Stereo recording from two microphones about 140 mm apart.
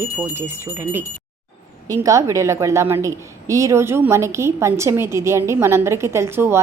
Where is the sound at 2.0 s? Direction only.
20° right (ahead or behind).